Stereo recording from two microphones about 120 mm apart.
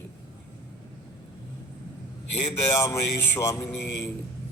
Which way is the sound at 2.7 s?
25° left (ahead or behind).